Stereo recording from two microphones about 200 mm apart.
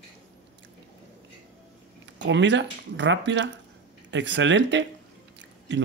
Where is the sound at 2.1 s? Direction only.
65° right (ahead or behind).